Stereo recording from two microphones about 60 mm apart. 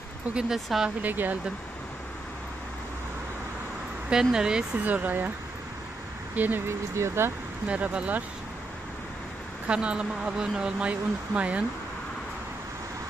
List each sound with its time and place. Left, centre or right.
0.3 s speech: centre
1.0 s speech: right
4.1 s speech: centre
4.7 s speech: right
6.3 s speech: right
7.0 s speech: right
7.6 s speech: right
9.7 s speech: centre